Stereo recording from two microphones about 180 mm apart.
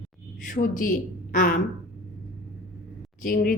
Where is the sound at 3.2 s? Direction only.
50° left (ahead or behind).